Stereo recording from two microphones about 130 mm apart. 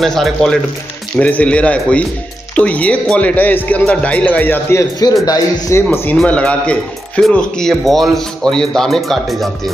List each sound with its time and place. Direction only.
0.0 s a man's voice: centre (ahead or behind); by 5.9 s 25° left (ahead or behind)
6.1 s a man's voice: 10° left (ahead or behind)